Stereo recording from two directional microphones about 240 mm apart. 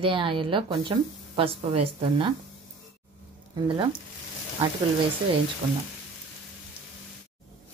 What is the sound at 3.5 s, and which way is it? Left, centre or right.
Speech, centre.